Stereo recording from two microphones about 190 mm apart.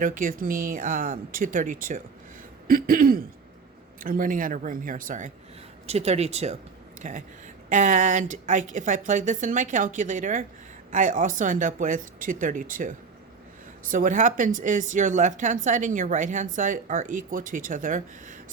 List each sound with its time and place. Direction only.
0.0 s a woman's voice: 45° right (ahead or behind)
5.8 s a woman's voice: 35° right (ahead or behind)
13.9 s a woman's voice: 45° right (ahead or behind)